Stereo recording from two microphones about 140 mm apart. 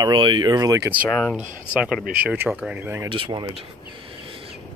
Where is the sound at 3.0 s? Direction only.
35° right (ahead or behind).